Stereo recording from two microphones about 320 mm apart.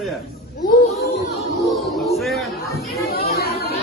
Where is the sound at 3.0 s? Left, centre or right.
Left.